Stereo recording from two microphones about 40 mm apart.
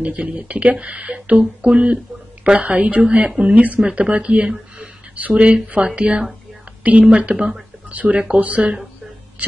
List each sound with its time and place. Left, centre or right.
0.0 s a woman's voice: right
3.5 s a woman's voice: right
7.9 s speech: right